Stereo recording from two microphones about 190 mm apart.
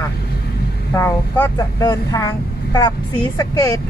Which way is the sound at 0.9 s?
10° left (ahead or behind).